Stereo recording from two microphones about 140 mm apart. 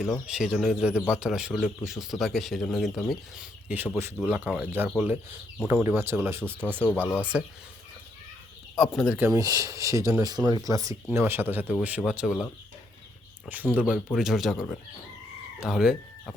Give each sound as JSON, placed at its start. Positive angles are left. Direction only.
{"t": 0.3, "sound": "a man's voice", "side_deg": -5}
{"t": 8.7, "sound": "speech", "side_deg": 0}
{"t": 9.1, "sound": "speech", "side_deg": -20}
{"t": 13.5, "sound": "a man's voice", "side_deg": -10}
{"t": 15.6, "sound": "speech", "side_deg": -5}